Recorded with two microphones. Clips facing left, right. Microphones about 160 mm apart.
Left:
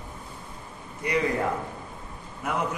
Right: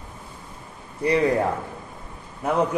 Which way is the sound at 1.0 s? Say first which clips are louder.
Right 7 dB; 35° right (ahead or behind).